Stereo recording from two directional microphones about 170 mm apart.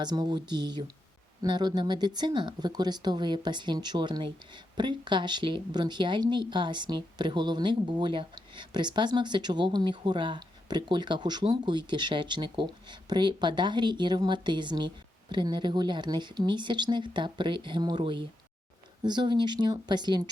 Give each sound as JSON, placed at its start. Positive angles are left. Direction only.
{"t": 0.0, "sound": "a woman's voice", "side_deg": -25}